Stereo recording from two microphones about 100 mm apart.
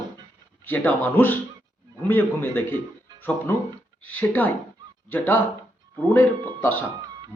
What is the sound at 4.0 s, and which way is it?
A man's voice, 15° left (ahead or behind).